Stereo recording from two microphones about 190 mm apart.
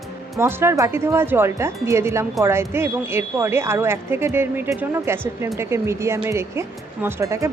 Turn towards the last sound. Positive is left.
turn(degrees=-15)  # may be behind; listen again after turning